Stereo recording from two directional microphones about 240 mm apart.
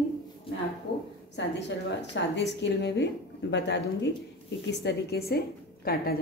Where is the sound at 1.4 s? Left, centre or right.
Left.